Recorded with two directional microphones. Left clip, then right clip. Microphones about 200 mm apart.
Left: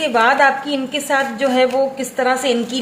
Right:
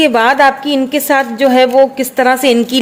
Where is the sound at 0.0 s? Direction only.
45° right (ahead or behind).